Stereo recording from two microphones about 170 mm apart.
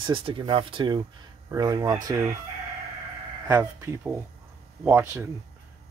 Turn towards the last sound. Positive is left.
turn(degrees=-10)  # may be behind; listen again after turning